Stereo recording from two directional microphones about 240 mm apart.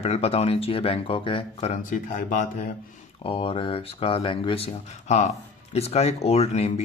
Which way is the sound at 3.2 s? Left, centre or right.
Left.